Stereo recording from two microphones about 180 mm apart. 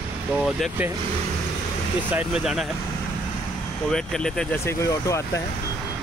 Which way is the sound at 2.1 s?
5° right (ahead or behind).